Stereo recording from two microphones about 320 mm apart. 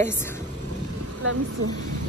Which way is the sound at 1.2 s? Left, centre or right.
Right.